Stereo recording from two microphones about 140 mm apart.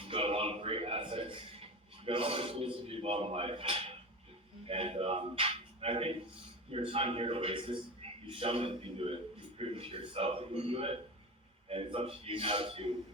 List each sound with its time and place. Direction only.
0.1 s a man's voice: 45° right (ahead or behind)